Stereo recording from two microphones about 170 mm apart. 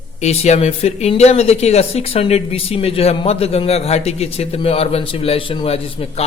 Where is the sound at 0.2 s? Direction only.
40° left (ahead or behind).